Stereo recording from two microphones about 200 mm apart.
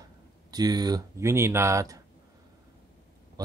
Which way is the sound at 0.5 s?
20° right (ahead or behind).